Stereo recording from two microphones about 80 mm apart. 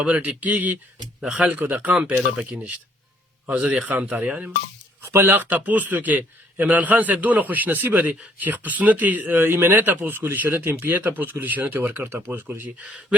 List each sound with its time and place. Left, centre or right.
0.0 s a man's voice: centre
1.2 s a man's voice: centre
5.0 s a man's voice: right